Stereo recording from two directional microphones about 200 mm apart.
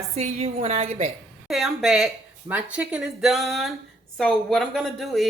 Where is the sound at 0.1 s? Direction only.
30° right (ahead or behind).